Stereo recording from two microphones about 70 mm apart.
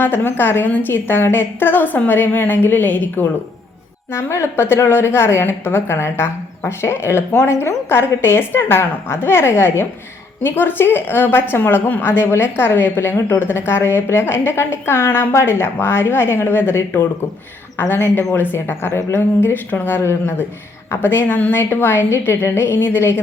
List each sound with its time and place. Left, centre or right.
0.0 s a woman's voice: left
4.1 s a woman's voice: left